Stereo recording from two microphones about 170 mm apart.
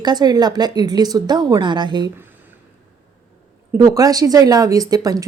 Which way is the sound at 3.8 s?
20° right (ahead or behind).